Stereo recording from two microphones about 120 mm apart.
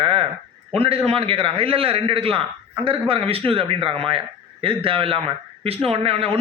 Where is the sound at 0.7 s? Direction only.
55° right (ahead or behind).